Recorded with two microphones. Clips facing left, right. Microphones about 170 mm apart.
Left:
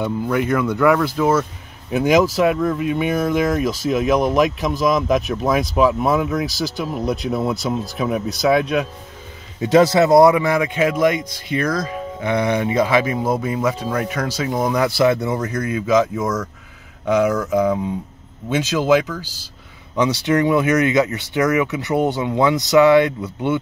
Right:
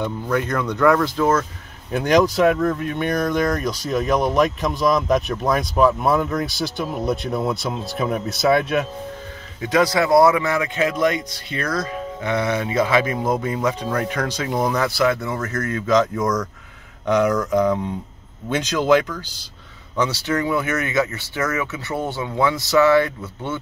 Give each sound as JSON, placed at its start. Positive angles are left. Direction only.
{"t": 0.0, "sound": "speech", "side_deg": 10}
{"t": 9.6, "sound": "speech", "side_deg": 25}
{"t": 14.8, "sound": "speech", "side_deg": 20}
{"t": 20.0, "sound": "speech", "side_deg": 20}